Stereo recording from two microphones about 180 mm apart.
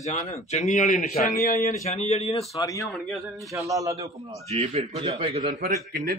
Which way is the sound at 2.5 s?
20° left (ahead or behind).